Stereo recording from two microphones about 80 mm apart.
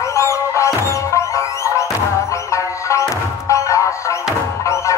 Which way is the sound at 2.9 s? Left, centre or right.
Left.